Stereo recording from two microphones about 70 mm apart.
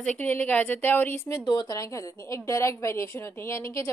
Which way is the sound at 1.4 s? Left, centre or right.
Left.